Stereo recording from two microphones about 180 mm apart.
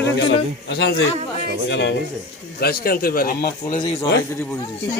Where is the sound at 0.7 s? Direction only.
70° left (ahead or behind).